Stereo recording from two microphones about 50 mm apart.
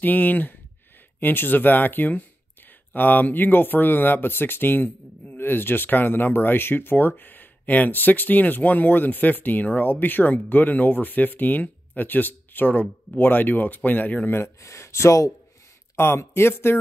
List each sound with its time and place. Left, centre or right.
0.0 s speech: left
14.6 s speech: left
16.0 s speech: left